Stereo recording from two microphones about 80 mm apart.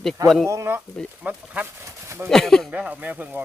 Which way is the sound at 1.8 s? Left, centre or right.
Right.